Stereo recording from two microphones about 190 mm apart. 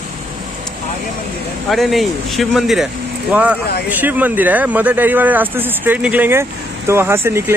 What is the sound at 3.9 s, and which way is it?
Speech, 10° right (ahead or behind).